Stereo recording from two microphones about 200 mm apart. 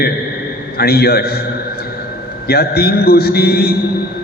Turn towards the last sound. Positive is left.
turn(degrees=50)  # may be behind; listen again after turning